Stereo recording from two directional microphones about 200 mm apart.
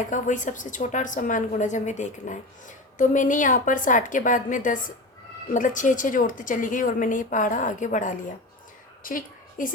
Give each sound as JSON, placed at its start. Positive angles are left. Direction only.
{"t": 0.1, "sound": "a woman's voice", "side_deg": 40}